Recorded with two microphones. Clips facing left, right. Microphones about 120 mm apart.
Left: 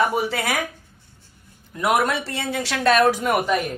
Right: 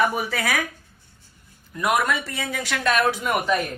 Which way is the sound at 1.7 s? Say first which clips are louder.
Left 2 dB; 25° left (ahead or behind).